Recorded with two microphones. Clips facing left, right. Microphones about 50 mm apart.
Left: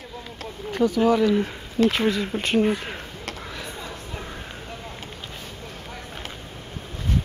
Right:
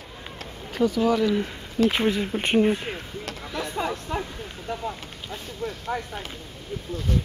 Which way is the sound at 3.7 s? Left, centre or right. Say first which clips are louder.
Right 8 dB; right.